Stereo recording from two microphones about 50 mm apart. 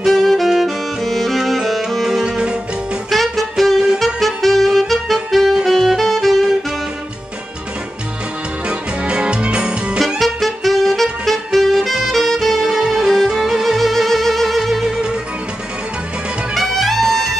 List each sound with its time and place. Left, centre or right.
0.0 s saxophone: centre
2.0 s music: centre
2.4 s music: right
3.1 s saxophone: centre
8.6 s music: right
9.9 s music: centre
16.5 s music: centre